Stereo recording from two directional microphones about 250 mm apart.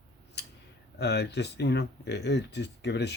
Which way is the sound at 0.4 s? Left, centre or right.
Left.